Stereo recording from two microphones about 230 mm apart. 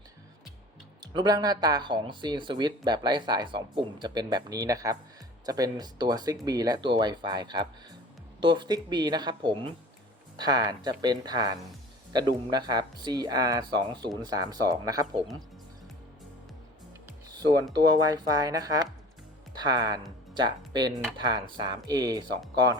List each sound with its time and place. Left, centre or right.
1.0 s speech: centre
17.9 s speech: centre